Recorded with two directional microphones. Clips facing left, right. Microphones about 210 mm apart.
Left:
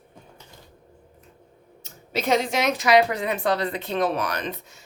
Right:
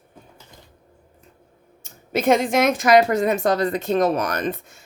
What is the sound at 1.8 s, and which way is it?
Speech, 50° right (ahead or behind).